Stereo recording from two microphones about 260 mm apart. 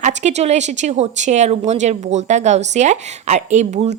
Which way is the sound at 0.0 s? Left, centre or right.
Right.